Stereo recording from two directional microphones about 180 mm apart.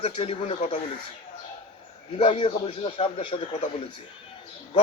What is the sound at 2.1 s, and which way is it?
A man's voice, 30° left (ahead or behind).